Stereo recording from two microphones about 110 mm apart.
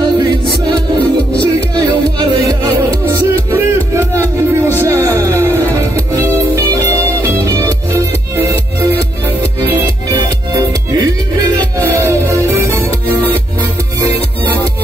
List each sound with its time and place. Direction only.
2.6 s music: 25° right (ahead or behind)
11.8 s music: 25° right (ahead or behind)